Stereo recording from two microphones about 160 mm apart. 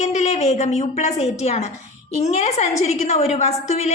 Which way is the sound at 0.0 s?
45° left (ahead or behind).